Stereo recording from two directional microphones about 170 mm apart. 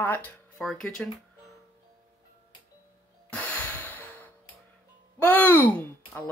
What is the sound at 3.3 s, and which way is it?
Music, 10° left (ahead or behind).